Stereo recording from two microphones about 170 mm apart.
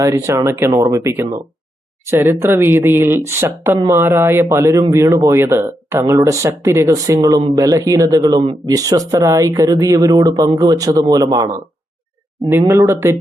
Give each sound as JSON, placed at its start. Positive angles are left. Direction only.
{"t": 0.0, "sound": "speech", "side_deg": -15}